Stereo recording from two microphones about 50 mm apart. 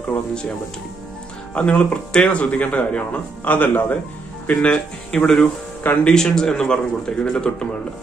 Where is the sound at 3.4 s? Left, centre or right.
Left.